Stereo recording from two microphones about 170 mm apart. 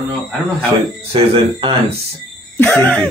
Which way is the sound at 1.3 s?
35° right (ahead or behind).